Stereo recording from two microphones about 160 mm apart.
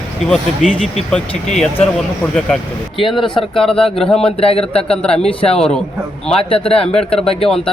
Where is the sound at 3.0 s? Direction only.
30° left (ahead or behind).